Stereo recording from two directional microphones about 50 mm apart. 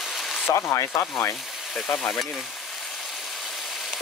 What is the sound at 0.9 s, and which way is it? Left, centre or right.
Rub, left.